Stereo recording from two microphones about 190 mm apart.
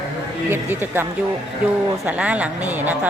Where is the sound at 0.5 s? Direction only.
10° right (ahead or behind).